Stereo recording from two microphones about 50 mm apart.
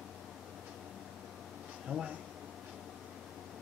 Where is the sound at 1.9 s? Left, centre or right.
Right.